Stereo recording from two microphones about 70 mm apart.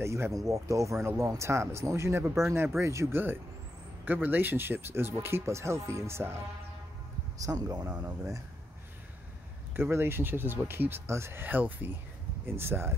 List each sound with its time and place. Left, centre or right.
0.0 s speech: right
7.3 s speech: right
9.8 s speech: right
11.4 s speech: right